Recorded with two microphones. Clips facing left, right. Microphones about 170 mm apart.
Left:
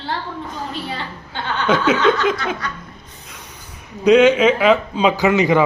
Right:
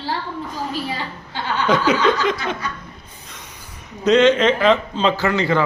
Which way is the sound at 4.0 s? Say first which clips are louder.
Left 2 dB; 10° left (ahead or behind).